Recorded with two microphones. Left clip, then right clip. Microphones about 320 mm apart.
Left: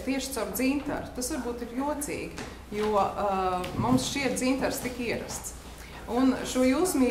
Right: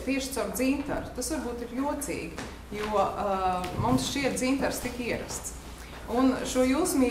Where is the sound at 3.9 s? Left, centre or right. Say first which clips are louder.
Left 1 dB; left.